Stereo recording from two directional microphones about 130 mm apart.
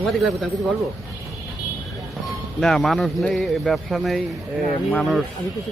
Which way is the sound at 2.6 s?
Centre (ahead or behind).